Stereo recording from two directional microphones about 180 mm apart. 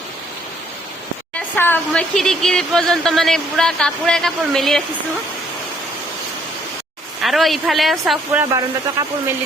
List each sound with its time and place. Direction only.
1.4 s speech: 10° left (ahead or behind)
7.2 s speech: centre (ahead or behind)